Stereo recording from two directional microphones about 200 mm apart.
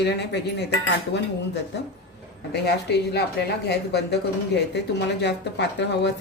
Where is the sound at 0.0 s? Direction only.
55° left (ahead or behind).